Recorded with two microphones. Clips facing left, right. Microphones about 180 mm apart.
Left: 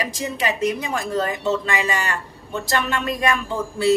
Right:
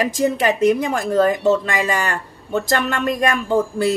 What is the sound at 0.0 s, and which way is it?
Speech, 50° right (ahead or behind).